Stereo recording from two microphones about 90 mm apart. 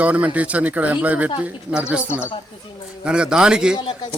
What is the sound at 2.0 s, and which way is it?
Speech, 25° left (ahead or behind).